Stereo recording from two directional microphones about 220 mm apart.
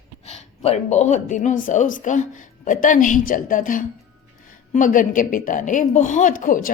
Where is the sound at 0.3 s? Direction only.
30° left (ahead or behind).